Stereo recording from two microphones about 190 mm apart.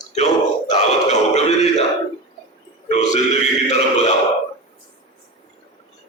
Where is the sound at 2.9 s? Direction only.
35° left (ahead or behind).